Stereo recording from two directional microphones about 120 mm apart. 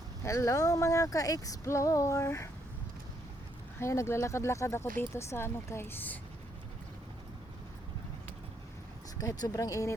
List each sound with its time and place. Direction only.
0.2 s speech: 25° left (ahead or behind)
3.8 s speech: 25° left (ahead or behind)
9.1 s speech: 30° left (ahead or behind)